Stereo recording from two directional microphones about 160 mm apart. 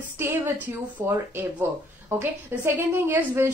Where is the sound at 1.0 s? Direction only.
15° right (ahead or behind).